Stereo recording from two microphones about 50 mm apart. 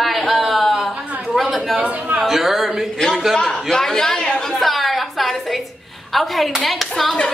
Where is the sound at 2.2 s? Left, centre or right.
Centre.